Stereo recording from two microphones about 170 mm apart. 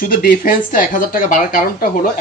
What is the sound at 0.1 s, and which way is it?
A man's voice, 60° left (ahead or behind).